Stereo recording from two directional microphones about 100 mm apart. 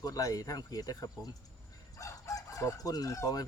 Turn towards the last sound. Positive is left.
turn(degrees=40)  # may be behind; listen again after turning